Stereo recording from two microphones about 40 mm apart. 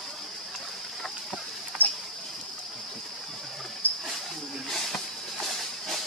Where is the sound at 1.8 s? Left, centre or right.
Left.